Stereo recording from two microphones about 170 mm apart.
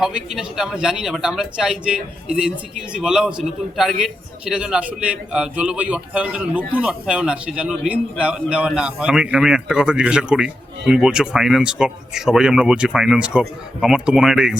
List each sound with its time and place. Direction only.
0.0 s a man's voice: 5° right (ahead or behind)